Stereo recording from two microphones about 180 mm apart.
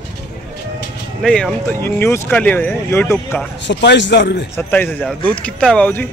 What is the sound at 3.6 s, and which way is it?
Speech, 75° left (ahead or behind).